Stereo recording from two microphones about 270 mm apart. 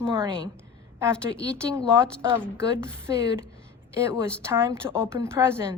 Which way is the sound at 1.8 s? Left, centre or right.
Centre.